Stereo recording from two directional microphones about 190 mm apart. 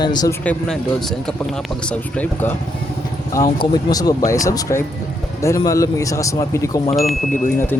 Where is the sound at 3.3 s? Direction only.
20° left (ahead or behind).